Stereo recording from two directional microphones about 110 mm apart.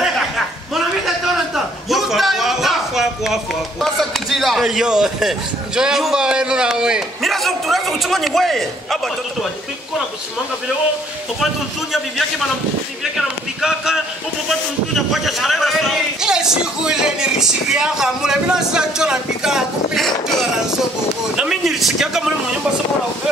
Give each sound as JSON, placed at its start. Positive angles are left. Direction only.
{"t": 1.0, "sound": "a sound", "side_deg": 0}
{"t": 3.8, "sound": "a man's voice", "side_deg": 0}
{"t": 13.6, "sound": "a man's voice", "side_deg": -5}
{"t": 15.0, "sound": "a man's voice", "side_deg": 0}
{"t": 21.4, "sound": "a man's voice", "side_deg": -5}